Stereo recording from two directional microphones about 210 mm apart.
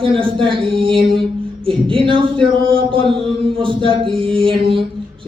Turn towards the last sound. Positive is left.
turn(degrees=-25)  # may be behind; listen again after turning